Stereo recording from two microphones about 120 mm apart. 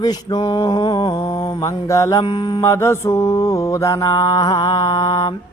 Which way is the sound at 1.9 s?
25° left (ahead or behind).